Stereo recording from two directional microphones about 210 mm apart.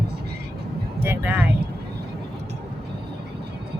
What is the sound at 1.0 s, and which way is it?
Speech, 10° right (ahead or behind).